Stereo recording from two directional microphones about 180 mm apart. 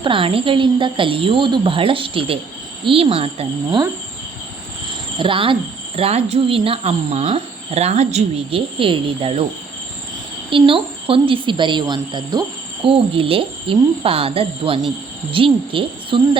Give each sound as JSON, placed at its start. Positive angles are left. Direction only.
{"t": 0.0, "sound": "speech", "side_deg": -30}
{"t": 4.9, "sound": "cricket", "side_deg": -30}
{"t": 6.0, "sound": "speech", "side_deg": -35}
{"t": 10.5, "sound": "speech", "side_deg": -30}